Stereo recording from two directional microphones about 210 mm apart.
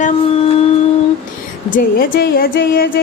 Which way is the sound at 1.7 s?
45° left (ahead or behind).